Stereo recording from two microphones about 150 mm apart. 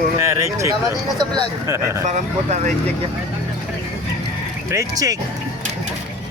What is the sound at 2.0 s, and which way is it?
Speech, 55° right (ahead or behind).